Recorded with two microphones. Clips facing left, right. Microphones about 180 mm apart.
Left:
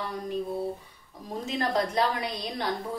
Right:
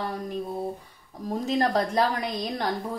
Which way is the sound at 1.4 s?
40° right (ahead or behind).